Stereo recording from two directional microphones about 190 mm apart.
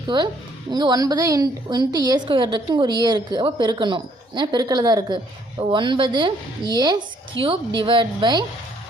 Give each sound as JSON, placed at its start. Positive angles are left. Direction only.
{"t": 0.1, "sound": "a woman's voice", "side_deg": -25}